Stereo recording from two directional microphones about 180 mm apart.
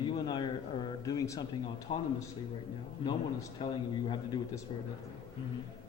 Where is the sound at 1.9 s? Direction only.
30° left (ahead or behind).